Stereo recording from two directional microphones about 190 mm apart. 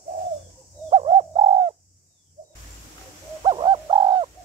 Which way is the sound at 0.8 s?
30° right (ahead or behind).